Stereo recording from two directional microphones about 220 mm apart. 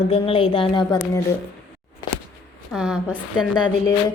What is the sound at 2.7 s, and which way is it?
Speech, 5° right (ahead or behind).